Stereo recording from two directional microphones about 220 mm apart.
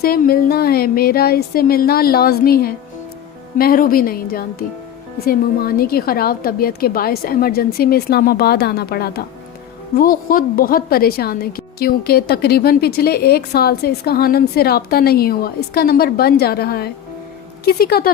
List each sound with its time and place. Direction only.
0.0 s a woman's voice: 40° left (ahead or behind)